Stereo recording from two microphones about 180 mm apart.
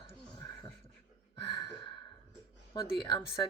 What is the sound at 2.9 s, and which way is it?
Speech, 25° left (ahead or behind).